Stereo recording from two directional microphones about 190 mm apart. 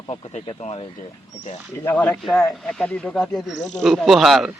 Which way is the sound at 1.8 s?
10° left (ahead or behind).